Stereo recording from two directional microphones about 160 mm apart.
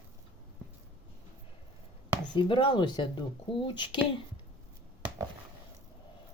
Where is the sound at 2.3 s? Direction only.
30° left (ahead or behind).